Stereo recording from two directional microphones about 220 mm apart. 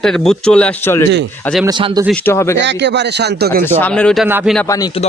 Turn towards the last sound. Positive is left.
turn(degrees=-10)  # may be behind; listen again after turning